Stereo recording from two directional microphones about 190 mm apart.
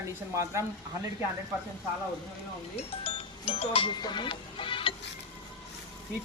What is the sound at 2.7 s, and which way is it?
Music, 30° left (ahead or behind).